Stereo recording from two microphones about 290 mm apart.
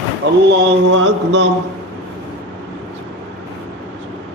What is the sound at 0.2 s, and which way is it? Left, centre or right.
A man's voice, right.